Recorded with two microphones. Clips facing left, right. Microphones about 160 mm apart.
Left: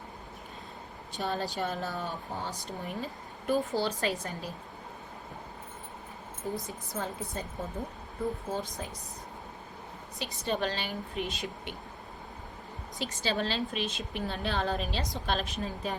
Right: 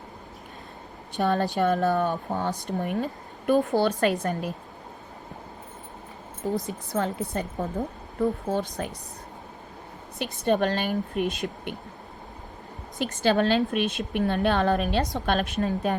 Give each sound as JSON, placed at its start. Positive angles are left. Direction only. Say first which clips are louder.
{"t": 1.1, "sound": "speech", "louder": "right 9 dB", "side_deg": -60}
{"t": 6.4, "sound": "a woman's voice", "louder": "right 8 dB", "side_deg": -75}
{"t": 8.4, "sound": "speech", "louder": "right 7 dB", "side_deg": -65}
{"t": 10.4, "sound": "speech", "louder": "right 8 dB", "side_deg": -55}
{"t": 13.2, "sound": "speech", "louder": "right 10 dB", "side_deg": -60}